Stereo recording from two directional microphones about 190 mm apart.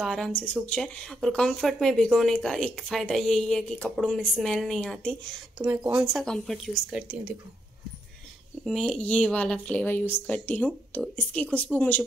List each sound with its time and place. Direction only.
0.0 s speech: centre (ahead or behind)
5.6 s speech: 5° right (ahead or behind)
8.6 s speech: centre (ahead or behind)